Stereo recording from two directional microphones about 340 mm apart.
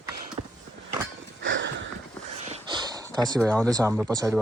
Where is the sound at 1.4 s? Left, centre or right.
Right.